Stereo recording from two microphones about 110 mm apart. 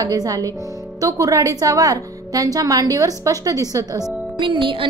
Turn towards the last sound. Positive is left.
turn(degrees=-50)  # may be behind; listen again after turning